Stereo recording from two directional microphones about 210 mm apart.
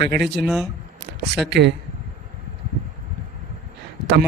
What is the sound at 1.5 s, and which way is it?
Speech, 55° right (ahead or behind).